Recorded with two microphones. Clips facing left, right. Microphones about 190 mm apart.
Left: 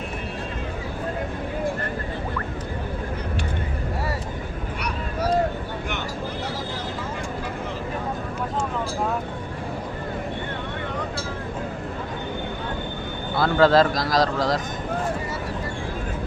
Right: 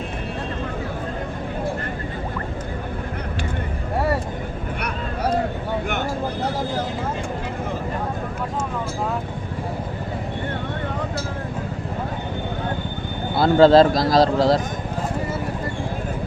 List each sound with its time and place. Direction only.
3.9 s vehicle: 60° right (ahead or behind)
13.3 s speech: 25° right (ahead or behind)